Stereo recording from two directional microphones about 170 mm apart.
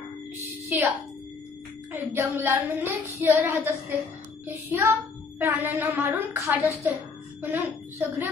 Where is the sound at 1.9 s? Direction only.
15° right (ahead or behind).